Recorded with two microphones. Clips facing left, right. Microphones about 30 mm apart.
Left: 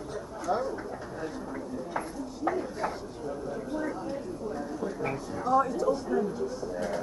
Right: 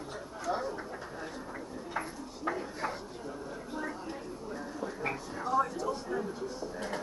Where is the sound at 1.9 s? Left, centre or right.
Centre.